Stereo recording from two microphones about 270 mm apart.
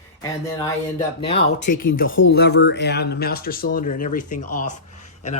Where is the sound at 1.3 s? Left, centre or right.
Left.